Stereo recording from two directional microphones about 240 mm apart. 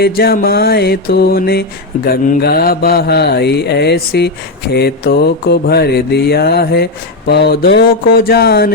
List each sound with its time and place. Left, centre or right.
0.0 s mantra: left